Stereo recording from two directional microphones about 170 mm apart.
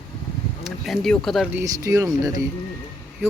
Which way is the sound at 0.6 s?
Centre (ahead or behind).